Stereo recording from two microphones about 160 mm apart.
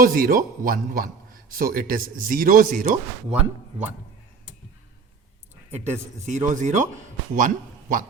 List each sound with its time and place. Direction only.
0.0 s a man's voice: 60° right (ahead or behind)
5.8 s speech: 45° right (ahead or behind)